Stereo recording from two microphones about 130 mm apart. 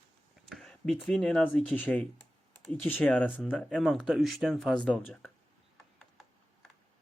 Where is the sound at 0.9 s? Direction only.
5° left (ahead or behind).